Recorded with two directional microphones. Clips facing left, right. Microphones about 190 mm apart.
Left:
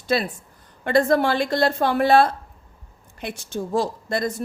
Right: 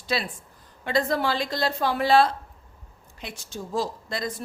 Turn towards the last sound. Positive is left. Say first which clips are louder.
# left 6 dB
turn(degrees=55)  # may be behind; listen again after turning